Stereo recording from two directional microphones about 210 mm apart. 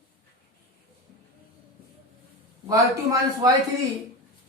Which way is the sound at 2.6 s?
15° right (ahead or behind).